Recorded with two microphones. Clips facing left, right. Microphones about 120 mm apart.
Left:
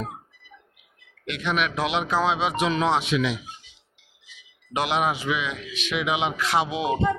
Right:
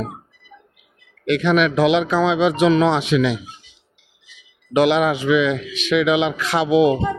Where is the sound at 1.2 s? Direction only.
80° right.